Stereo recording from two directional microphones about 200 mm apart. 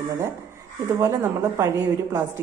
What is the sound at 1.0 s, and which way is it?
A woman's voice, 15° right (ahead or behind).